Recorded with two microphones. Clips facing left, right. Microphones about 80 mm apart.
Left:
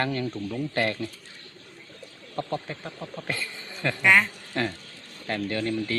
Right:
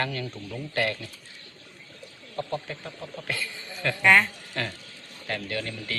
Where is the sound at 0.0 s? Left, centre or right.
Left.